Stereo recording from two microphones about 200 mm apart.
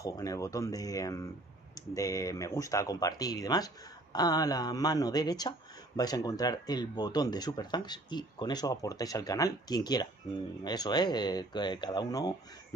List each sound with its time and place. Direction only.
0.0 s speech: 15° left (ahead or behind)